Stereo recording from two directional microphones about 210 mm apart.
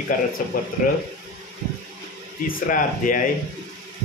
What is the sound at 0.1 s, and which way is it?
Speech, 40° left (ahead or behind).